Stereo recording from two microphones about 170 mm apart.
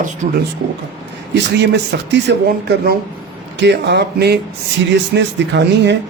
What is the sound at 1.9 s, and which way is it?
Speech, 65° right (ahead or behind).